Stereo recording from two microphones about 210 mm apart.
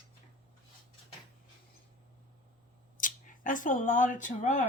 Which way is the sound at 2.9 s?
40° left (ahead or behind).